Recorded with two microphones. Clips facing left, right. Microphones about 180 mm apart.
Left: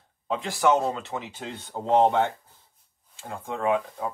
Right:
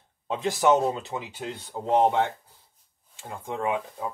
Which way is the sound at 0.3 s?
20° right (ahead or behind).